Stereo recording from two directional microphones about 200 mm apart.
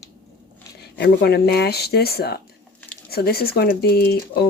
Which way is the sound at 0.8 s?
55° left (ahead or behind).